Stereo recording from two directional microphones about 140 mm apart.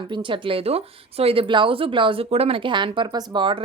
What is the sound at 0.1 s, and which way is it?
Speech, 35° right (ahead or behind).